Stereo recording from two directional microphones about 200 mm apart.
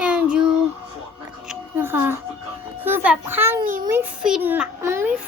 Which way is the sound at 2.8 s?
10° right (ahead or behind).